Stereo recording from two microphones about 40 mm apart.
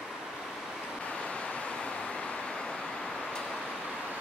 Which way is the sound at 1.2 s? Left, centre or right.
Left.